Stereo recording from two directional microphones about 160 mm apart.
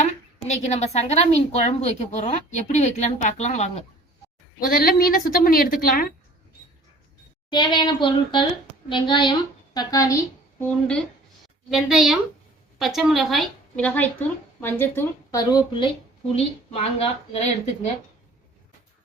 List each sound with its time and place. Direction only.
0.5 s a woman's voice: 45° left (ahead or behind)
4.6 s a woman's voice: 65° left (ahead or behind)
7.5 s a child's voice: 30° left (ahead or behind)
10.6 s a woman's voice: 5° left (ahead or behind); by 15.9 s 25° left (ahead or behind)
16.3 s speech: 35° left (ahead or behind)